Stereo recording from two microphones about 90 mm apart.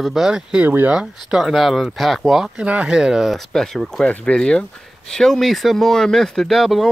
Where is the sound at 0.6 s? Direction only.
20° right (ahead or behind).